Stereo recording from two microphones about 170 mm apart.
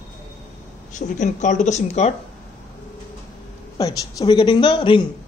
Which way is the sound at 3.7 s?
25° left (ahead or behind).